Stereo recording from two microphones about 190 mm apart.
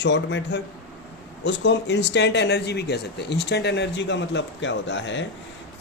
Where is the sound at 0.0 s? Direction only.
70° left (ahead or behind).